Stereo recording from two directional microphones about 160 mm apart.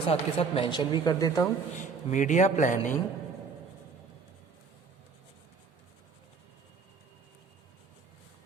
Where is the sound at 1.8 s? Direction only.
50° left (ahead or behind).